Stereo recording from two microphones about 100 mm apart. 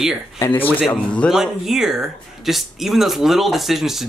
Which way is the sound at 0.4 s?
20° left (ahead or behind).